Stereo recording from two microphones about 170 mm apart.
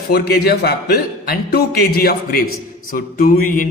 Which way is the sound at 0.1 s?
65° left (ahead or behind).